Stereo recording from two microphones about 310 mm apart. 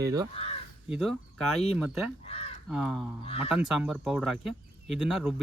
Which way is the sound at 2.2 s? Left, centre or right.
Centre.